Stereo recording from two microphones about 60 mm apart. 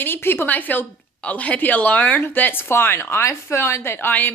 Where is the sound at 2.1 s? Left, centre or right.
Left.